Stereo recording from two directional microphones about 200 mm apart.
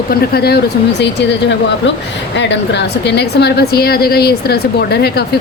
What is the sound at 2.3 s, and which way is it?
A woman's voice, 60° left (ahead or behind).